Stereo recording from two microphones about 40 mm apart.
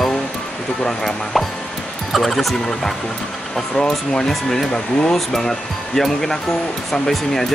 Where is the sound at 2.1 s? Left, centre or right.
Centre.